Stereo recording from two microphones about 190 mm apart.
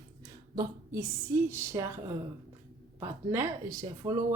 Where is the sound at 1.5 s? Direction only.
15° right (ahead or behind).